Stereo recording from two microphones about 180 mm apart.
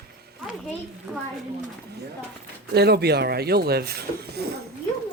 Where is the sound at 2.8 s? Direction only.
65° right (ahead or behind).